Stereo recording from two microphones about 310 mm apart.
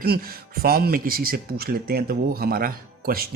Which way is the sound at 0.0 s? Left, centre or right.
Right.